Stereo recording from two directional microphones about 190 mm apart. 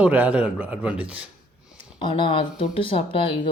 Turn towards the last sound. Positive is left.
turn(degrees=30)  # may be behind; listen again after turning